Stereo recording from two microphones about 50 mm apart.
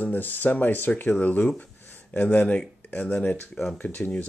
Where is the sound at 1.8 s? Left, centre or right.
Left.